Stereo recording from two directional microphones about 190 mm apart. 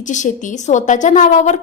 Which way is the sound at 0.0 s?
40° left (ahead or behind).